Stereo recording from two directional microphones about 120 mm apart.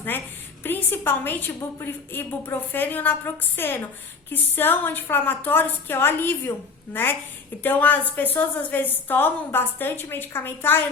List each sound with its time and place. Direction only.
0.6 s a woman's voice: 15° left (ahead or behind)